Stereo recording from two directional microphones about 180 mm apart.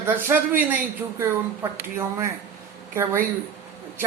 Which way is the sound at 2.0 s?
15° right (ahead or behind).